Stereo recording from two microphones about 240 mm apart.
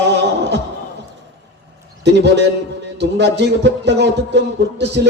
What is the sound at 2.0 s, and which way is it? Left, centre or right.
A man's voice, right.